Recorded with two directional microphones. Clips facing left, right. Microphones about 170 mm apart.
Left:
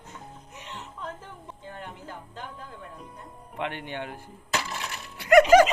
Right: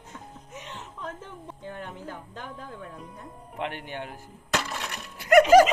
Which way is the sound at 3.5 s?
40° right (ahead or behind).